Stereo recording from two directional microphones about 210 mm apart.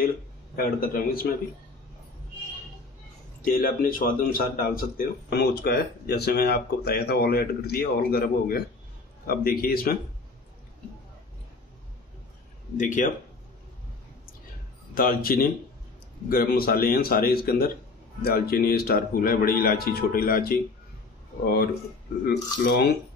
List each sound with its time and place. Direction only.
0.6 s speech: 45° left (ahead or behind)
3.4 s speech: 40° left (ahead or behind)
12.7 s speech: 40° left (ahead or behind)
15.0 s speech: 45° left (ahead or behind)
22.2 s speech: 50° left (ahead or behind)